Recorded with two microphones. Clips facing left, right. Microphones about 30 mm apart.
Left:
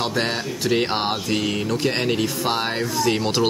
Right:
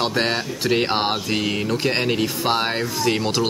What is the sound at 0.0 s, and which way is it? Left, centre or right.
Speech, centre.